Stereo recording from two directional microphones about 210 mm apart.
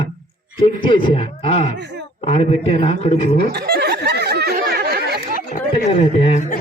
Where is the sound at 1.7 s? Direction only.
55° right (ahead or behind).